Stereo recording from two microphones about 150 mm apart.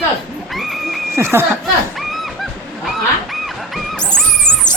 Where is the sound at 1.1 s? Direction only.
15° right (ahead or behind).